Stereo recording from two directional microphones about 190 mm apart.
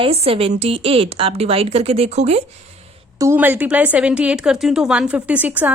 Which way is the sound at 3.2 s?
10° right (ahead or behind).